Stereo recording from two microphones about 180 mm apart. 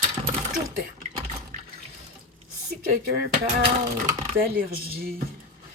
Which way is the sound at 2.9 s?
60° right (ahead or behind).